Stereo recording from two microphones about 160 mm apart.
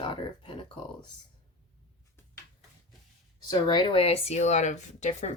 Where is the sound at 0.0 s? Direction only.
30° left (ahead or behind).